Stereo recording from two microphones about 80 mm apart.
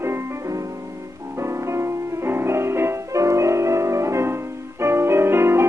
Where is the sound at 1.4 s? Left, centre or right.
Right.